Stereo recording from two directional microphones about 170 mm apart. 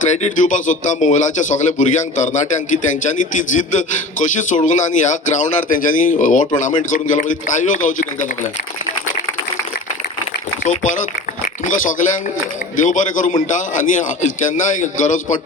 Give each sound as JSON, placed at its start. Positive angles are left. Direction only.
{"t": 0.1, "sound": "speech", "side_deg": 45}
{"t": 10.6, "sound": "speech", "side_deg": 50}